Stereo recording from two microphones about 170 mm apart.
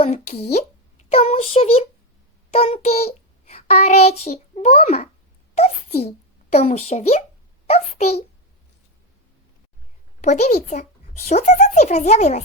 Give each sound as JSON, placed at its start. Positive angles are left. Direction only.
{"t": 0.0, "sound": "a child's voice", "side_deg": 35}
{"t": 10.2, "sound": "a child's voice", "side_deg": 40}